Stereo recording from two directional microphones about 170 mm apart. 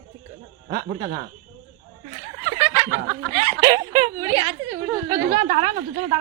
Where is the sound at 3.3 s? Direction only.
25° right (ahead or behind).